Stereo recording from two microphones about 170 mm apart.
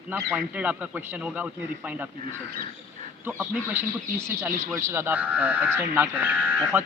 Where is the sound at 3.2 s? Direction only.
10° right (ahead or behind).